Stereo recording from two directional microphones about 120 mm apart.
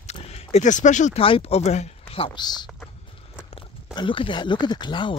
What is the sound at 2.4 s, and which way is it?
Speech, 35° left (ahead or behind).